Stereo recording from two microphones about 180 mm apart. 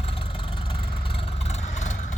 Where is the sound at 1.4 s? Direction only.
40° left (ahead or behind).